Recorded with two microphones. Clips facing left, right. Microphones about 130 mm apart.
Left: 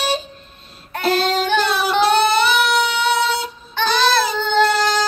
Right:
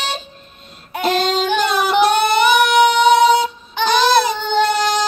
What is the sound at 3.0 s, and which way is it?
Music, 15° right (ahead or behind).